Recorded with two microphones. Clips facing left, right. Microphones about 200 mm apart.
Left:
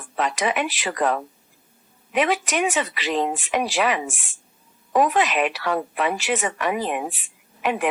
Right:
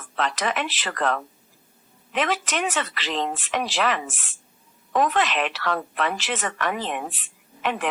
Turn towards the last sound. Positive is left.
turn(degrees=10)  # may be behind; listen again after turning